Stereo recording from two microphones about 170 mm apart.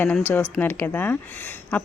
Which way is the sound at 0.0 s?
10° left (ahead or behind).